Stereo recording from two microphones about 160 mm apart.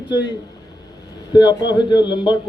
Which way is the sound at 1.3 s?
25° left (ahead or behind).